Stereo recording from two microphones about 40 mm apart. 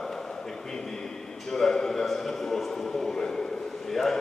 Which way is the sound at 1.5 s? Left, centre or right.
Centre.